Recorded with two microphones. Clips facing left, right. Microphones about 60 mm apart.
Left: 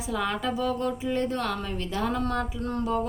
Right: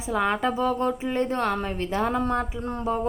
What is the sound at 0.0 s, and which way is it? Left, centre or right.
A woman's voice, right.